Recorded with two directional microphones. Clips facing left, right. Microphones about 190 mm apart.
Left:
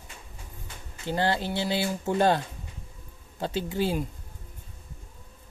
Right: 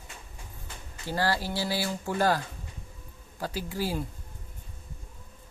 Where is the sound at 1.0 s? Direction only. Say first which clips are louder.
Left 2 dB; 20° left (ahead or behind).